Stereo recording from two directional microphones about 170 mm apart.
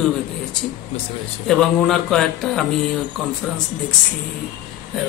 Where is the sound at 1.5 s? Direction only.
Centre (ahead or behind).